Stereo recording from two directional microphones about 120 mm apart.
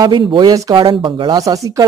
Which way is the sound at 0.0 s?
40° right (ahead or behind).